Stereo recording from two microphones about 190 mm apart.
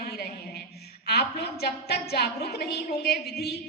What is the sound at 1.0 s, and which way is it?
A woman's voice, 55° left (ahead or behind).